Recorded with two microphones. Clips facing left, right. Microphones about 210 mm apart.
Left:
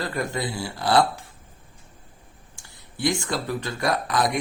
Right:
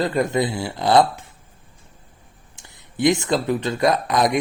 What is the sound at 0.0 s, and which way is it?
Speech, 20° right (ahead or behind).